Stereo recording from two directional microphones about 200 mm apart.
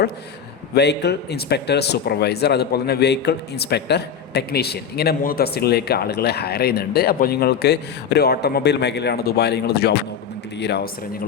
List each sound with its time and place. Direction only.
0.7 s a man's voice: 55° left (ahead or behind)